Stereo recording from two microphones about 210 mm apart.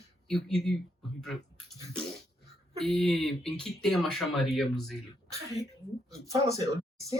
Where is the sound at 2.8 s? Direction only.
Centre (ahead or behind).